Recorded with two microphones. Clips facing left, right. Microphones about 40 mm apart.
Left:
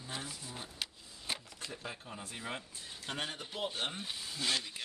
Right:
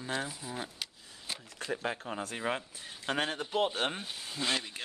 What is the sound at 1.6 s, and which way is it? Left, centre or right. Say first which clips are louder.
Speech: right 9 dB; right.